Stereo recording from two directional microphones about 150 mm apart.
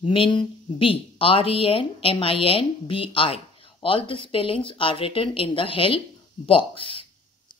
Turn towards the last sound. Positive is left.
turn(degrees=35)  # may be behind; listen again after turning